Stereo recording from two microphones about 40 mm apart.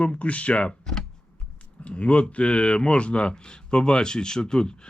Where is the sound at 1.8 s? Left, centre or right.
Left.